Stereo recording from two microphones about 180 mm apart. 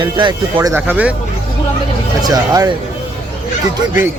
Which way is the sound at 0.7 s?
10° right (ahead or behind).